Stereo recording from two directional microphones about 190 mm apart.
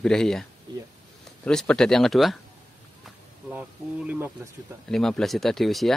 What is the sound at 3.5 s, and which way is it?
Speech, 5° right (ahead or behind).